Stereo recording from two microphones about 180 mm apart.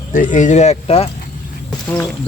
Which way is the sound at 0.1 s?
45° left (ahead or behind).